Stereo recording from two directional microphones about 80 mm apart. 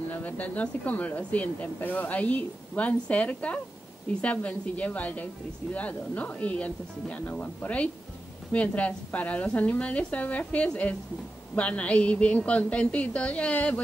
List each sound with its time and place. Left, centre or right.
0.1 s a woman's voice: left